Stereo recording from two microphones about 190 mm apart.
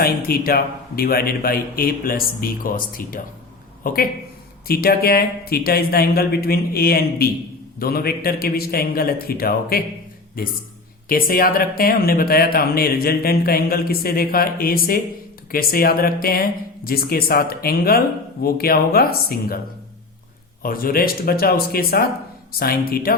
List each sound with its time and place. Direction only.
0.0 s speech: 55° left (ahead or behind)
20.6 s speech: 50° left (ahead or behind)